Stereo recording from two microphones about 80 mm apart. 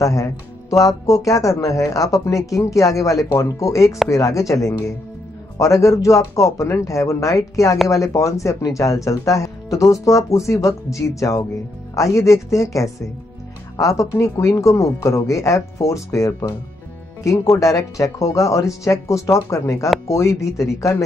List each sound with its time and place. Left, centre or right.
0.0 s speech: left